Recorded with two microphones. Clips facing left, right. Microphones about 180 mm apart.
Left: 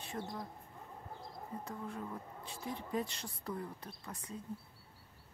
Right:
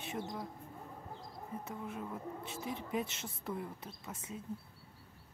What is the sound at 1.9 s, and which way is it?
Speech, 10° right (ahead or behind).